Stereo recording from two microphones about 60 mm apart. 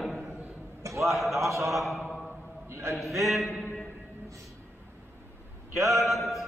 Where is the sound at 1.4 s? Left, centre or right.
Right.